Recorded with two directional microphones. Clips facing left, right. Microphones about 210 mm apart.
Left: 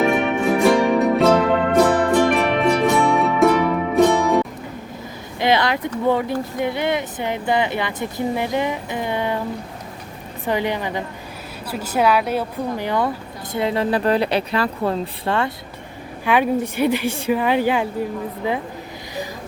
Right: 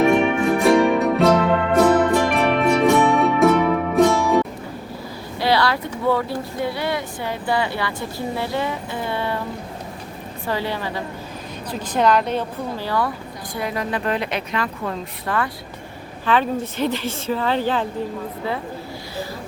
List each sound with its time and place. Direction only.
0.0 s music: centre (ahead or behind)
5.4 s a sound: 20° left (ahead or behind)
6.1 s speech: 20° left (ahead or behind)
10.4 s a woman's voice: 20° left (ahead or behind)
16.2 s a woman's voice: 10° left (ahead or behind)